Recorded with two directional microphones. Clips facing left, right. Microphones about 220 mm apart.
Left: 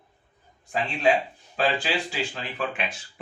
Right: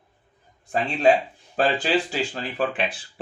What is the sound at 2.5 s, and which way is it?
Speech, 35° right (ahead or behind).